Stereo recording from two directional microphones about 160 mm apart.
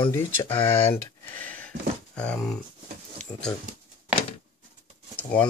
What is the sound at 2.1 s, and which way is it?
Speech, 5° left (ahead or behind).